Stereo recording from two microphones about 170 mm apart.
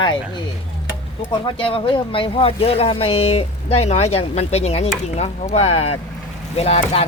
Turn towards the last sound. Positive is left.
turn(degrees=35)  # may be behind; listen again after turning